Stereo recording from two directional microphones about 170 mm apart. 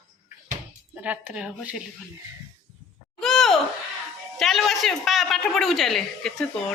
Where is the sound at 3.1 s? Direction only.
Centre (ahead or behind).